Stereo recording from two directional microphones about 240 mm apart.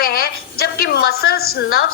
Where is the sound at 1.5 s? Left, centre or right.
Left.